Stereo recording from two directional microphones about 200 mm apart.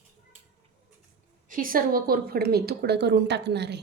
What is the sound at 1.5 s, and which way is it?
A woman's voice, 45° right (ahead or behind).